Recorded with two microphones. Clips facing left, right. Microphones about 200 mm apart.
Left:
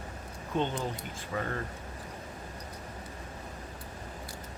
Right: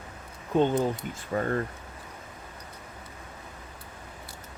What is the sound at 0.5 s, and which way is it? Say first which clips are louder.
Speech: right 8 dB; 45° right (ahead or behind).